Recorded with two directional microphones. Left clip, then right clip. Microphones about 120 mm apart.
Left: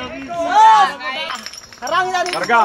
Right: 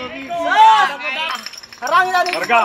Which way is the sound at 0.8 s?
35° right (ahead or behind).